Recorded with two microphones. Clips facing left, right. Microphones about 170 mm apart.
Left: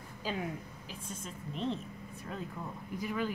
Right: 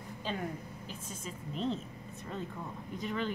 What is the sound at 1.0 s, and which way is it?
Speech, centre (ahead or behind).